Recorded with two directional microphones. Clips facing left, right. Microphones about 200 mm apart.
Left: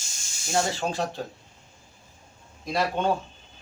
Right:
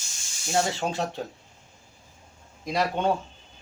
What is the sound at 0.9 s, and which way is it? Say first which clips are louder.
Speech: even; 20° right (ahead or behind).